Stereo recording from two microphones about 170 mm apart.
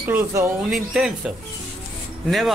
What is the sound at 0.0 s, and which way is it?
Speech, 10° right (ahead or behind).